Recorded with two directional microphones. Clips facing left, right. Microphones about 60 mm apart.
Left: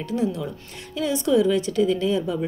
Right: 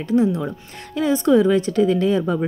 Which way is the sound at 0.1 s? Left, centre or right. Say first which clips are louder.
Right 7 dB; right.